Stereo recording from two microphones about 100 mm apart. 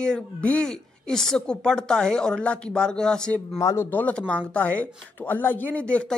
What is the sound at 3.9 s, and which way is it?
Speech, 15° left (ahead or behind).